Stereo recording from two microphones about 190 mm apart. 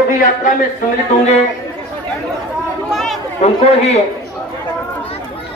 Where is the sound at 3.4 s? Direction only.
35° left (ahead or behind).